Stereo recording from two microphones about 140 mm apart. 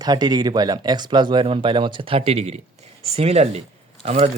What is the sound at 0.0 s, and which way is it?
Speech, 30° right (ahead or behind).